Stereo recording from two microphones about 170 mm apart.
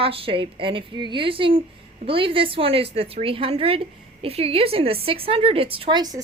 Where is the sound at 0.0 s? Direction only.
30° right (ahead or behind).